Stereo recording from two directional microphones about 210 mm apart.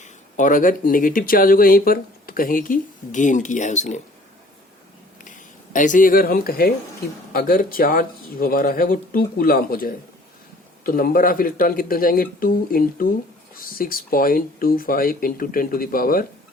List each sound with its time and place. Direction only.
0.0 s speech: 35° left (ahead or behind)
5.2 s speech: 40° left (ahead or behind)